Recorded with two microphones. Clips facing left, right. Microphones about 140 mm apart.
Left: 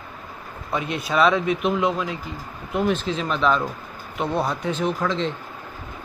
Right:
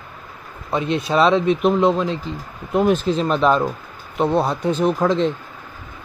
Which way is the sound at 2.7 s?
40° right (ahead or behind).